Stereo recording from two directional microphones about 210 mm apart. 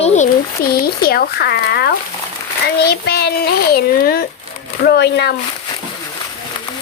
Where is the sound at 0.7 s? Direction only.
45° left (ahead or behind).